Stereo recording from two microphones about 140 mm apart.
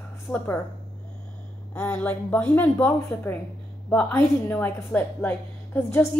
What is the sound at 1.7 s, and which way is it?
A woman's voice, 10° left (ahead or behind).